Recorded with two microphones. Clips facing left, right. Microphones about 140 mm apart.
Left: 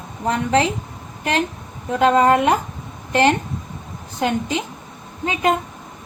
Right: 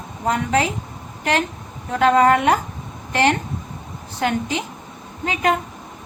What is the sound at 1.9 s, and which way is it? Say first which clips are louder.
Speech: even; 20° left (ahead or behind).